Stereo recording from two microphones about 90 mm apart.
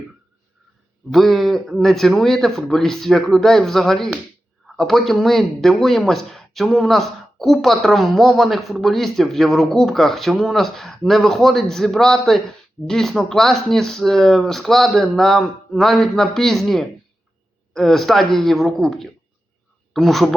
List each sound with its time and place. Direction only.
1.1 s speech: centre (ahead or behind)